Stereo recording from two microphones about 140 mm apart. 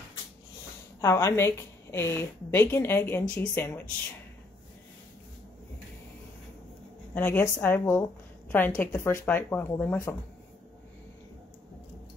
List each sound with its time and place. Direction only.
1.0 s a woman's voice: 20° left (ahead or behind)
7.2 s a woman's voice: 15° left (ahead or behind)